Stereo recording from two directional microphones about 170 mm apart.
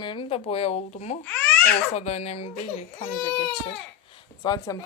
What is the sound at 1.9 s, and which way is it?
Speech, 40° left (ahead or behind).